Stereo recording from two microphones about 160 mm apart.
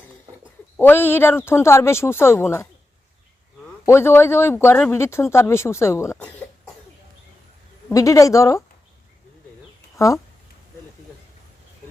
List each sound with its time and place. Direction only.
0.8 s speech: 10° left (ahead or behind)
3.8 s speech: 15° left (ahead or behind)
7.9 s a woman's voice: 20° left (ahead or behind)